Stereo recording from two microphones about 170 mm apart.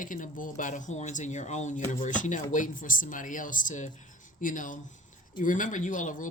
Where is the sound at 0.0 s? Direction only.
50° left (ahead or behind).